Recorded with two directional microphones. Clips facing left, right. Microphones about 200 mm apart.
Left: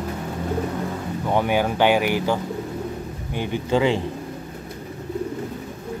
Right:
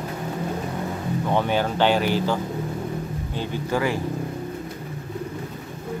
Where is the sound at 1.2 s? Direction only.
10° left (ahead or behind).